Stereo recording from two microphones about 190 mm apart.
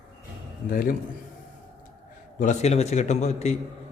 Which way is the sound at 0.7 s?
50° left (ahead or behind).